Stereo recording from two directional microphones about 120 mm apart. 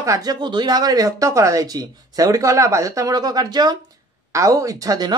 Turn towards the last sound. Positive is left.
turn(degrees=-30)  # may be behind; listen again after turning